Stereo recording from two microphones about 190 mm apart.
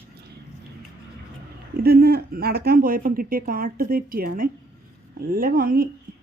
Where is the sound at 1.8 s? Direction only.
55° right (ahead or behind).